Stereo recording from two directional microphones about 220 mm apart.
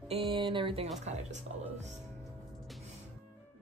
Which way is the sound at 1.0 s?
30° right (ahead or behind).